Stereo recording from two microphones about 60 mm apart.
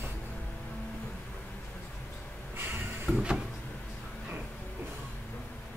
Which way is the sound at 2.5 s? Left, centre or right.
Right.